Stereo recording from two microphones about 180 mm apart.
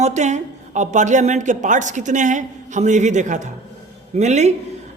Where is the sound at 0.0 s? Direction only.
40° right (ahead or behind).